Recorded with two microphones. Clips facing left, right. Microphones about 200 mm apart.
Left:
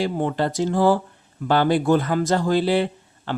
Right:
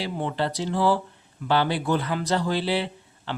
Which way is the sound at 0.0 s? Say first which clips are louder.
Left 5 dB; 45° left (ahead or behind).